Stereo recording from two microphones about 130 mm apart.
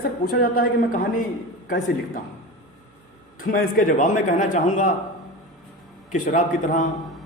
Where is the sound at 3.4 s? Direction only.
90° left.